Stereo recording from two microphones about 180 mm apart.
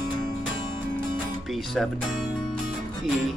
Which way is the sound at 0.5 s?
25° left (ahead or behind).